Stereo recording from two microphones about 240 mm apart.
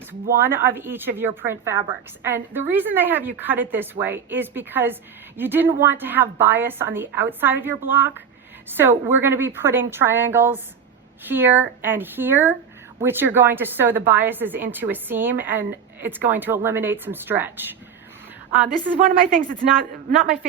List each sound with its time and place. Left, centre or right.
0.1 s a woman's voice: centre
19.6 s a woman's voice: right